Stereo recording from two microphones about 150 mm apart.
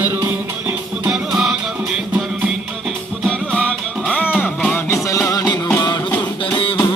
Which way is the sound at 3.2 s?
5° left (ahead or behind).